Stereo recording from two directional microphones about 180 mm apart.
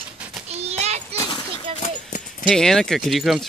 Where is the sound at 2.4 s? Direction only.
Centre (ahead or behind).